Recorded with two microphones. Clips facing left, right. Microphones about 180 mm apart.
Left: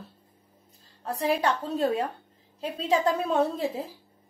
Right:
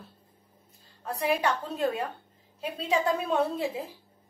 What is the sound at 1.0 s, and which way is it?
Speech, 35° left (ahead or behind).